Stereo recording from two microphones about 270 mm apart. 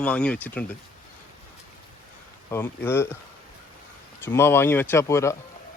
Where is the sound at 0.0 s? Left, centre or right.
Centre.